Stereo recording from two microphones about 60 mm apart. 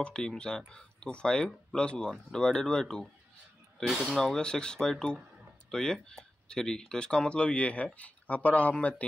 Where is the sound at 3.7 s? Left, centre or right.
Centre.